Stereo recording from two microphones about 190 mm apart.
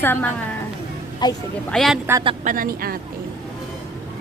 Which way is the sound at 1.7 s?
Centre (ahead or behind).